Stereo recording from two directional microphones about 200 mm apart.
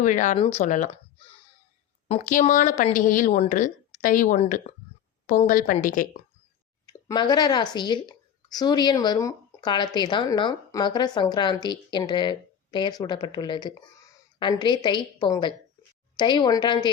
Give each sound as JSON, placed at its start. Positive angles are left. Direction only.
{"t": 0.0, "sound": "speech", "side_deg": 40}
{"t": 0.3, "sound": "a woman's voice", "side_deg": 25}
{"t": 0.6, "sound": "speech", "side_deg": 40}
{"t": 2.0, "sound": "speech", "side_deg": 40}
{"t": 6.8, "sound": "a woman's voice", "side_deg": 20}